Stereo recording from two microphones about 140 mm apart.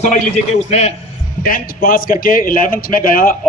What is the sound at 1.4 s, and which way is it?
A man's voice, 90° left.